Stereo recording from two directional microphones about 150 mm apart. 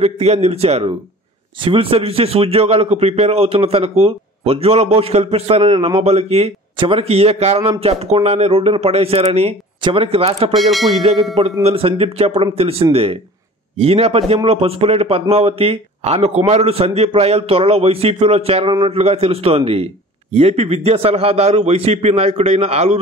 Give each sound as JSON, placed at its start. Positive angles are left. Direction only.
{"t": 0.0, "sound": "a man's voice", "side_deg": -45}
{"t": 10.5, "sound": "speech", "side_deg": 0}
{"t": 11.6, "sound": "a man's voice", "side_deg": -40}